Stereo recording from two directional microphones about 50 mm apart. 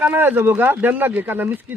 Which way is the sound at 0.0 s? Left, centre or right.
Right.